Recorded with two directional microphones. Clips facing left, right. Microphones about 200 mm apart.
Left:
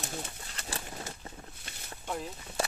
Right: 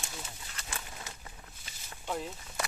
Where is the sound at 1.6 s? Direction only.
60° left (ahead or behind).